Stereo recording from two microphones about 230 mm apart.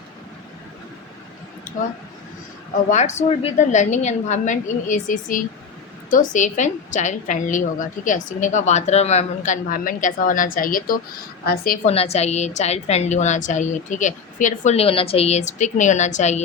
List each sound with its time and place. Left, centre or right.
2.9 s a woman's voice: left
11.9 s a woman's voice: left